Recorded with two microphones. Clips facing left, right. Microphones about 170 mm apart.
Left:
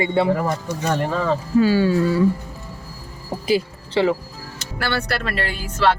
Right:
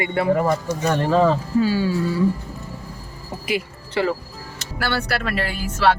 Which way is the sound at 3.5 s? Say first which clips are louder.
Left 5 dB; 30° left (ahead or behind).